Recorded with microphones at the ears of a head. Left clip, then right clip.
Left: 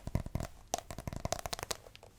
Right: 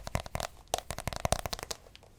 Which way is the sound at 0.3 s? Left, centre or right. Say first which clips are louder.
Right 4 dB; right.